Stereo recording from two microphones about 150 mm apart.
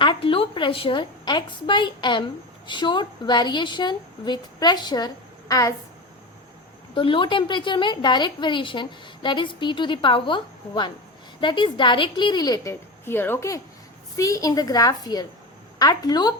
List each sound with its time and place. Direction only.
0.0 s a woman's voice: 35° left (ahead or behind)
6.9 s a woman's voice: 35° left (ahead or behind)
13.1 s a woman's voice: 15° left (ahead or behind)